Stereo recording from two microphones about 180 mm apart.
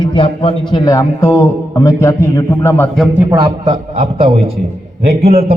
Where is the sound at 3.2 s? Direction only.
15° right (ahead or behind).